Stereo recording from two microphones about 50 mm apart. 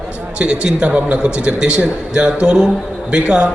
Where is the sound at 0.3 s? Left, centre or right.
Centre.